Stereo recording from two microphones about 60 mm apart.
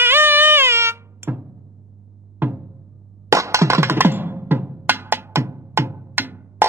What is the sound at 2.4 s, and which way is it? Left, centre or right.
Music, right.